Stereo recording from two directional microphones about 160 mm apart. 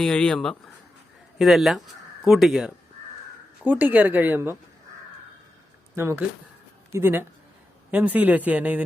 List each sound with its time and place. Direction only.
0.0 s a man's voice: 5° left (ahead or behind); by 4.5 s 15° right (ahead or behind)
6.0 s a man's voice: 15° right (ahead or behind)